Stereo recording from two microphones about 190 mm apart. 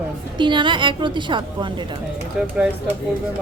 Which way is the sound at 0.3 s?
25° right (ahead or behind).